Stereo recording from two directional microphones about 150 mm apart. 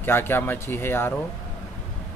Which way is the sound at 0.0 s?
15° left (ahead or behind).